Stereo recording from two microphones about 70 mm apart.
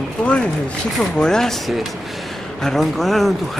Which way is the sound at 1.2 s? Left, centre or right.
Centre.